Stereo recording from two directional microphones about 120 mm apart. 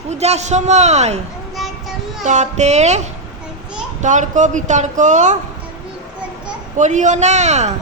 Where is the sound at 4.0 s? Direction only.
90° right.